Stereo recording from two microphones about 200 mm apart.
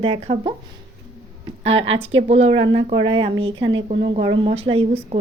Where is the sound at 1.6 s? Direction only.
30° right (ahead or behind).